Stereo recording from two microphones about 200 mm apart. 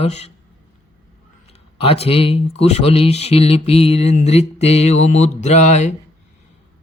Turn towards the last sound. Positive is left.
turn(degrees=35)  # may be behind; listen again after turning